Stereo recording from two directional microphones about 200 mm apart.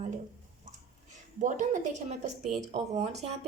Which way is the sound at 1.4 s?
40° right (ahead or behind).